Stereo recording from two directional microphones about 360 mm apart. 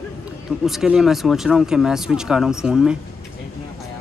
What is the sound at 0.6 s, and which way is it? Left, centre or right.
Speech, centre.